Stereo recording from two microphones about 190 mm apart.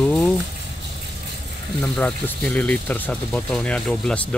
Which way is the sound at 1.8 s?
5° left (ahead or behind).